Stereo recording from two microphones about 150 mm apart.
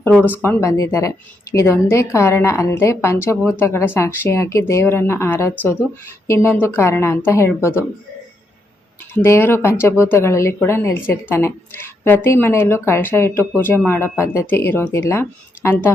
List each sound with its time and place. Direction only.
0.0 s speech: 5° left (ahead or behind)
0.4 s a woman's voice: 20° left (ahead or behind)
9.1 s speech: 15° left (ahead or behind)